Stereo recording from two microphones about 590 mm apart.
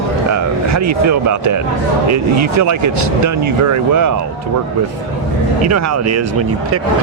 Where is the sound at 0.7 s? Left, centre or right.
Right.